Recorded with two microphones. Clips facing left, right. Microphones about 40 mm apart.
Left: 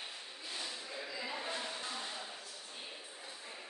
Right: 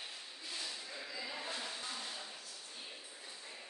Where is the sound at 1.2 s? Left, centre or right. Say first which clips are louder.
Left 2 dB; centre.